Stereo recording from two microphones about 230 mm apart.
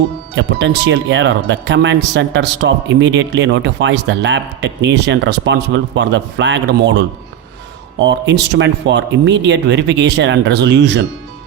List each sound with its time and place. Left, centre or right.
0.3 s speech: right